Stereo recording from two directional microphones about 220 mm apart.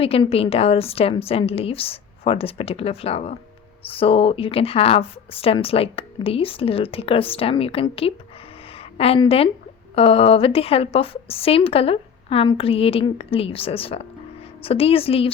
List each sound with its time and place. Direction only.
0.0 s a woman's voice: 25° left (ahead or behind)